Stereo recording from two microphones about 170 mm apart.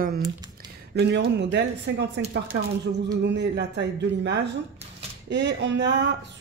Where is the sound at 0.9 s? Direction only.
85° right.